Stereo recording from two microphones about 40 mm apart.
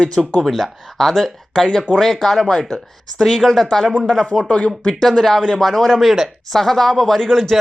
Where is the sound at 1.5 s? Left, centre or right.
Centre.